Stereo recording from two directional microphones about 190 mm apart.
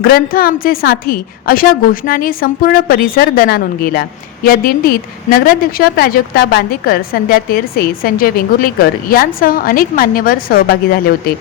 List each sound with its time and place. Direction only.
0.0 s a woman's voice: 50° left (ahead or behind)